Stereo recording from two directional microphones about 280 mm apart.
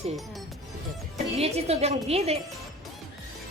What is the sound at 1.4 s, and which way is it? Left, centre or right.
Speech, right.